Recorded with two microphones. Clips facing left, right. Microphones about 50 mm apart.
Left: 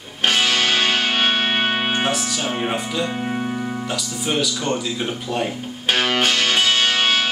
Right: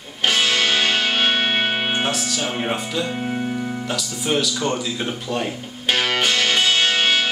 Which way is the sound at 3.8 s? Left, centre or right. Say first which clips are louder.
Even; centre.